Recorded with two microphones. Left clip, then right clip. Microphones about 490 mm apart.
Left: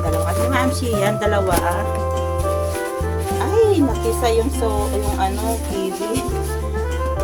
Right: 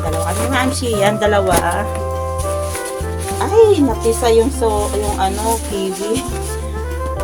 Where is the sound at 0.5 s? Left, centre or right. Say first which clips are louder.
Right 2 dB; left.